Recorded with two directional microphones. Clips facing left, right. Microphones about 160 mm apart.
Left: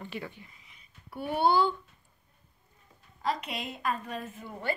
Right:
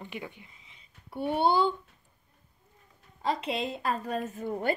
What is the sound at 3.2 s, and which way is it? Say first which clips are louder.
A woman's voice: right 3 dB; 25° right (ahead or behind).